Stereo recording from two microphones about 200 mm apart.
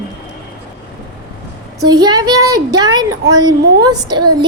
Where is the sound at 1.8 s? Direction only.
20° right (ahead or behind).